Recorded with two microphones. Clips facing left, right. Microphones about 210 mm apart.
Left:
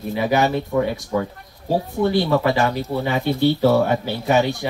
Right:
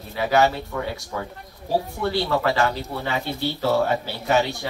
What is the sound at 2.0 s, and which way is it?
Speech, 15° left (ahead or behind).